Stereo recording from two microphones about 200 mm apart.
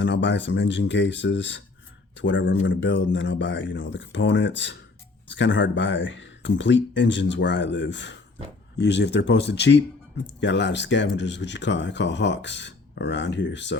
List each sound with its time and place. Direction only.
0.0 s speech: 65° left (ahead or behind)